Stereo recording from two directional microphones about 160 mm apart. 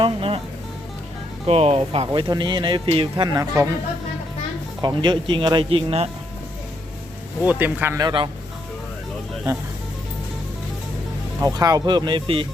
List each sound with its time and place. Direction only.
0.0 s music: 35° right (ahead or behind)
1.5 s speech: 40° right (ahead or behind); by 3.7 s 20° right (ahead or behind)
4.8 s speech: 30° right (ahead or behind)
7.4 s speech: 10° right (ahead or behind); by 8.3 s 25° right (ahead or behind)
11.4 s speech: 25° right (ahead or behind)